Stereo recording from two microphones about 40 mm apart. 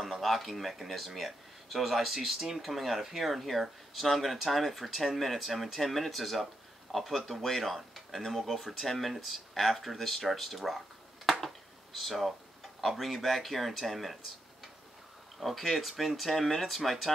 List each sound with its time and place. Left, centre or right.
0.0 s speech: centre
11.2 s a sound: centre
12.8 s speech: centre
15.4 s speech: centre